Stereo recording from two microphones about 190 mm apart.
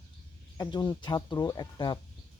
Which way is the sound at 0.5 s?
20° left (ahead or behind).